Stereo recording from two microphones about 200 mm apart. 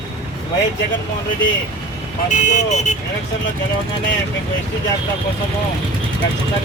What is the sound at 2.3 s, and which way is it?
Speech, 35° left (ahead or behind).